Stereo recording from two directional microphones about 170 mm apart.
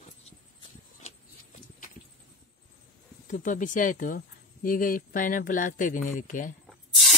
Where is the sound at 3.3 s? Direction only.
50° left (ahead or behind).